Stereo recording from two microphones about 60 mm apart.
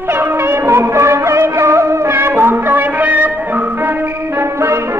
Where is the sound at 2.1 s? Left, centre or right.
Right.